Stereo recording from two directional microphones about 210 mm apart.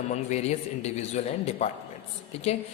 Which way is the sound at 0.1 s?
30° left (ahead or behind).